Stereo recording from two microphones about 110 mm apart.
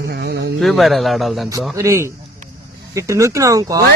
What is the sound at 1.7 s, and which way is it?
Speech, 25° right (ahead or behind).